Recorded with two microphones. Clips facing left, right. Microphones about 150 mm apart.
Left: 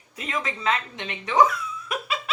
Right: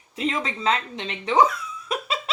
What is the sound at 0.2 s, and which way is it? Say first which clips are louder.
A woman's voice: right 4 dB; 30° right (ahead or behind).